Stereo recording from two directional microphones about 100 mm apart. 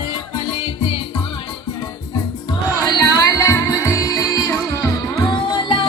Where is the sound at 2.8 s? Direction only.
35° left (ahead or behind).